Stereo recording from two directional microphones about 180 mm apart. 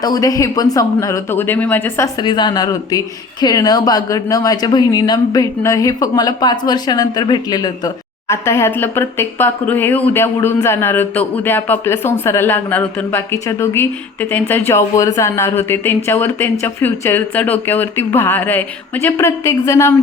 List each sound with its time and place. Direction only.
0.0 s speech: 20° left (ahead or behind)
2.1 s speech: 25° left (ahead or behind)